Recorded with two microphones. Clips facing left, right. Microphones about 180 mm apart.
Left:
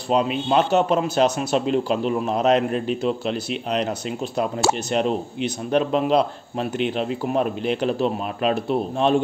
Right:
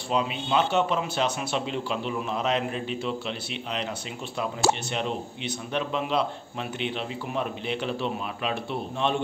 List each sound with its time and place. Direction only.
0.1 s a man's voice: 45° left (ahead or behind)
4.9 s a man's voice: 40° left (ahead or behind)